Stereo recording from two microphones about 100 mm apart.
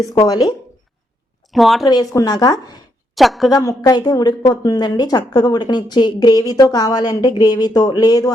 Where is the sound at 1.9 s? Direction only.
40° left (ahead or behind).